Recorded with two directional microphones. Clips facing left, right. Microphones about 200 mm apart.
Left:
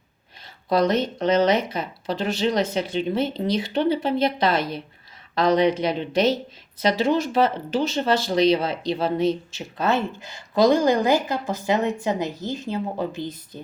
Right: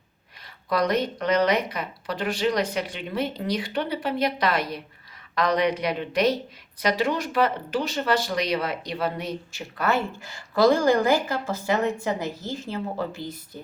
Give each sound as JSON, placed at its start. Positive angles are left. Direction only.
{"t": 0.7, "sound": "speech", "side_deg": 25}